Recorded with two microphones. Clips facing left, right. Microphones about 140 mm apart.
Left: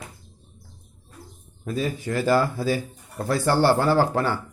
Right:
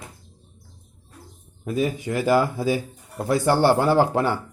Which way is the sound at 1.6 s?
15° right (ahead or behind).